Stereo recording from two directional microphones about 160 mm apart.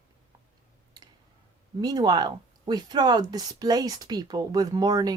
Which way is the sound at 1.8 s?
25° right (ahead or behind).